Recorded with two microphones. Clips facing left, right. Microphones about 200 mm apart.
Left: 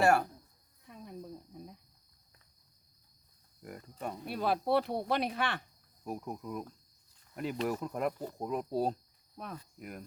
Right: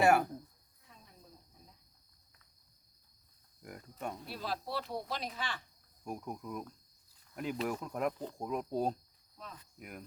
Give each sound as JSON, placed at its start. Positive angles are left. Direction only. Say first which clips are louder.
{"t": 0.0, "sound": "speech", "louder": "even", "side_deg": -5}
{"t": 0.9, "sound": "cricket", "louder": "left 14 dB", "side_deg": 60}
{"t": 3.6, "sound": "cricket", "louder": "left 3 dB", "side_deg": 0}
{"t": 4.3, "sound": "speech", "louder": "left 13 dB", "side_deg": 55}
{"t": 6.1, "sound": "speech", "louder": "left 2 dB", "side_deg": 5}
{"t": 9.4, "sound": "speech", "louder": "left 6 dB", "side_deg": 60}
{"t": 9.7, "sound": "cricket", "louder": "left 3 dB", "side_deg": 0}